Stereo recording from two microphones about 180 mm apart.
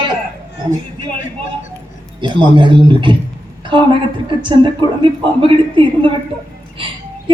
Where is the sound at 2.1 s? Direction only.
25° right (ahead or behind).